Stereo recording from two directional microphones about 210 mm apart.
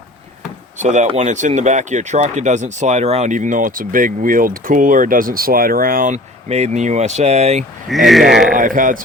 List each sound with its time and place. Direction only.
0.8 s speech: 35° right (ahead or behind)
7.9 s speech: centre (ahead or behind)
8.4 s speech: 40° right (ahead or behind)